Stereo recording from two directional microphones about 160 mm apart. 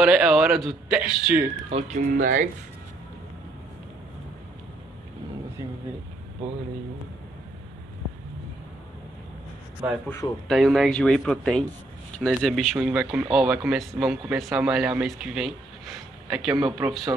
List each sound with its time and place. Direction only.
0.0 s speech: 5° right (ahead or behind)
1.7 s speech: 40° right (ahead or behind)
2.0 s speech: 55° right (ahead or behind)
9.8 s a man's voice: 10° right (ahead or behind)
10.5 s speech: centre (ahead or behind)